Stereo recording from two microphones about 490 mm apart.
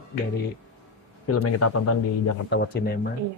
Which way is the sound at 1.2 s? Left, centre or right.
Left.